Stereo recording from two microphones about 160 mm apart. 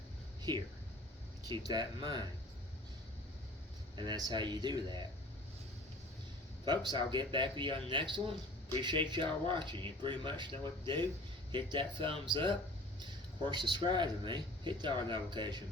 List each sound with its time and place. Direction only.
0.5 s speech: 25° right (ahead or behind)
3.9 s speech: 30° right (ahead or behind)
6.7 s speech: 25° right (ahead or behind)